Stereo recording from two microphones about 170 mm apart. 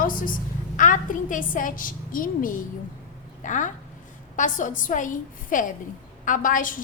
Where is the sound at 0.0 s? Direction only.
55° left (ahead or behind).